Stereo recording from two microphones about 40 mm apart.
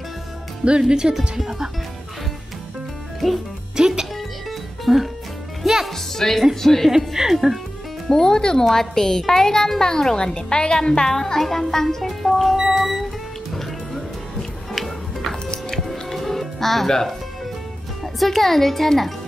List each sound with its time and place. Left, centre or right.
0.7 s speech: right
1.4 s speech: centre
3.7 s speech: centre
4.5 s music: centre
5.9 s speech: centre
6.9 s speech: centre
8.1 s speech: centre
12.5 s music: centre
14.7 s music: centre
18.0 s speech: centre